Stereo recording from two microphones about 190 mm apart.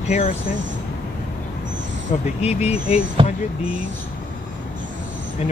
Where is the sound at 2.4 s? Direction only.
35° left (ahead or behind).